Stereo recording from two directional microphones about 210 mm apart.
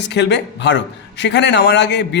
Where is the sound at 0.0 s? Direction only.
55° left (ahead or behind).